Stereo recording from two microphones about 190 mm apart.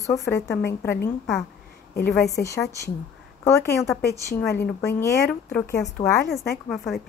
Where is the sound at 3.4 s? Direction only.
15° left (ahead or behind).